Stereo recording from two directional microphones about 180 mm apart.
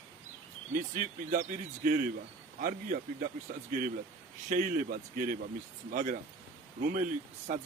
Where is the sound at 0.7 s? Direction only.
45° right (ahead or behind).